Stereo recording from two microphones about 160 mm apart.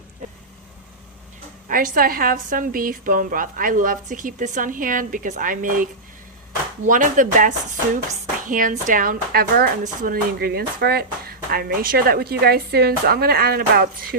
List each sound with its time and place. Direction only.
1.6 s a woman's voice: 60° right (ahead or behind)
9.8 s speech: 55° right (ahead or behind)
10.3 s speech: 80° right